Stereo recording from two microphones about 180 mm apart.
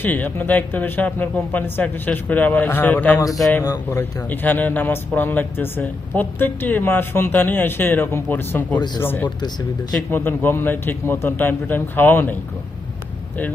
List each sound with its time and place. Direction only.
0.0 s speech: 10° left (ahead or behind)
4.3 s speech: 10° left (ahead or behind)